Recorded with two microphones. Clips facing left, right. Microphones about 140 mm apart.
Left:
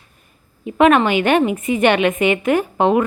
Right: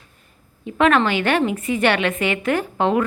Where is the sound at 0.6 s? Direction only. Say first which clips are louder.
Left 4 dB; 15° left (ahead or behind).